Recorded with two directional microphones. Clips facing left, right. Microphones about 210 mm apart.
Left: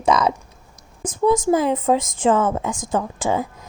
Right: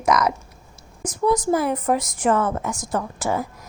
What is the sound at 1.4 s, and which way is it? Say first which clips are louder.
Speech: left 3 dB; 25° left (ahead or behind).